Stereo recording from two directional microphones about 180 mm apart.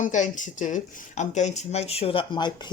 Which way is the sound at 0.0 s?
45° left (ahead or behind).